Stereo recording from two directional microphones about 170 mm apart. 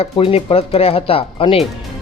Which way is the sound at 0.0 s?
35° left (ahead or behind).